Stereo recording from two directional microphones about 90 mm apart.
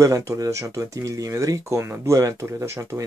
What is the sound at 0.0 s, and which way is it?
Speech, 35° right (ahead or behind).